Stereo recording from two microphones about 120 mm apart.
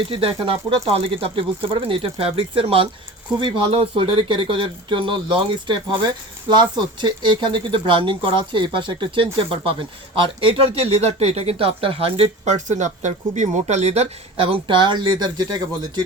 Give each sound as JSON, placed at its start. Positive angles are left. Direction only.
{"t": 0.1, "sound": "speech", "side_deg": -50}
{"t": 12.5, "sound": "speech", "side_deg": -90}